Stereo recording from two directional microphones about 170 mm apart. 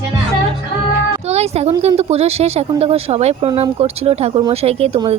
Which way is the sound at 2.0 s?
40° right (ahead or behind).